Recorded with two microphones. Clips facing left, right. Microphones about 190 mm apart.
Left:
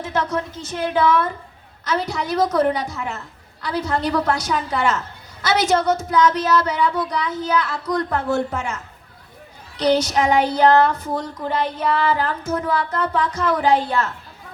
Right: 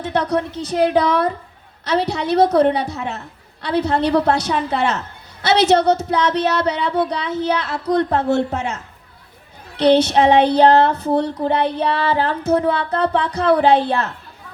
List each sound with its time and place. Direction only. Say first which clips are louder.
0.0 s a woman's voice: right 4 dB; 35° right (ahead or behind)
9.7 s child singing: right 5 dB; 30° right (ahead or behind)
10.6 s a woman's voice: right 2 dB; 30° right (ahead or behind)